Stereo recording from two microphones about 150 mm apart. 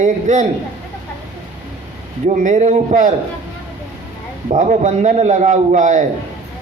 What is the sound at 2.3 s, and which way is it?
Speech, 55° right (ahead or behind).